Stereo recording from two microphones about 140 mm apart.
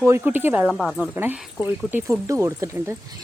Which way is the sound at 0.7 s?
5° left (ahead or behind).